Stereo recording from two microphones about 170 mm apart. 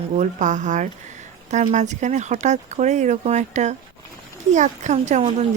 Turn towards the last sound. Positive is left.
turn(degrees=-40)  # may be behind; listen again after turning